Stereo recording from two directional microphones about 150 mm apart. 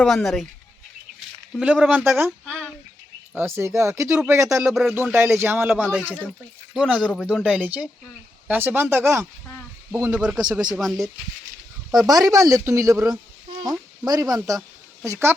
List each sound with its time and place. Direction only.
0.0 s speech: 5° left (ahead or behind)
1.5 s speech: 5° right (ahead or behind); by 4.6 s 20° right (ahead or behind)
4.6 s speech: centre (ahead or behind)
4.9 s speech: 15° right (ahead or behind)
5.8 s speech: 5° left (ahead or behind)
6.7 s speech: 5° right (ahead or behind)
11.9 s speech: 25° right (ahead or behind)